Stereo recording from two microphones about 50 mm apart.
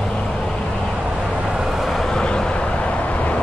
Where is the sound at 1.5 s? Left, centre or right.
Centre.